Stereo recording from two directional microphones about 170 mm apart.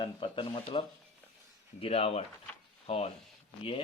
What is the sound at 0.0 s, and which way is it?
A man's voice, 30° left (ahead or behind).